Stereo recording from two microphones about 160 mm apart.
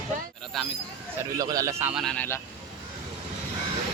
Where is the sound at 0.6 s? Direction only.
Centre (ahead or behind).